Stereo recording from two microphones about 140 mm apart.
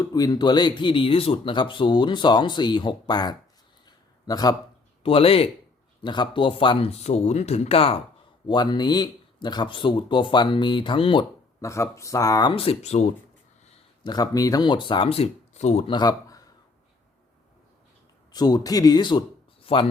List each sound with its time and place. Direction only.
0.0 s speech: 25° left (ahead or behind)
3.8 s a sound: 25° left (ahead or behind)
5.0 s speech: 45° left (ahead or behind)
8.4 s speech: 30° left (ahead or behind)
11.6 s speech: 20° left (ahead or behind)
12.5 s speech: 45° left (ahead or behind)
14.0 s speech: 30° left (ahead or behind); by 15.9 s 50° left (ahead or behind)
15.9 s speech: 30° left (ahead or behind)
18.3 s speech: 30° left (ahead or behind)